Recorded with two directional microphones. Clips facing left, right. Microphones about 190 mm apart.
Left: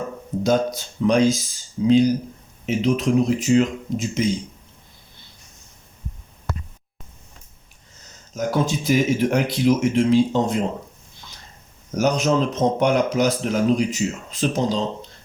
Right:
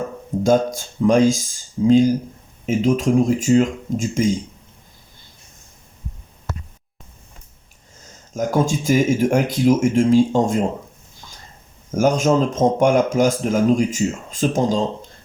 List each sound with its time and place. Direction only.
0.4 s speech: 45° right (ahead or behind)
8.3 s speech: 45° right (ahead or behind)
11.9 s speech: 45° right (ahead or behind)